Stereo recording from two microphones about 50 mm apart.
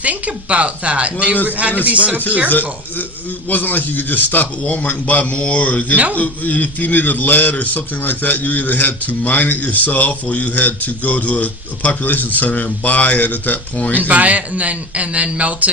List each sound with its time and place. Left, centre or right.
0.0 s a man's voice: right
2.5 s a man's voice: left
13.9 s a man's voice: right